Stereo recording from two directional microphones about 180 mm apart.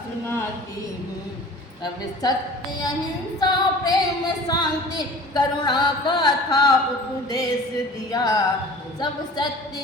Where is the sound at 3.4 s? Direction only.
20° left (ahead or behind).